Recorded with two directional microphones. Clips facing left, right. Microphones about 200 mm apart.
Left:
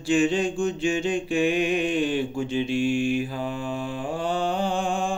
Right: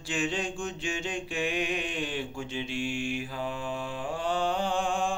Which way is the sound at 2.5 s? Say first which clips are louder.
Left 10 dB; 45° left (ahead or behind).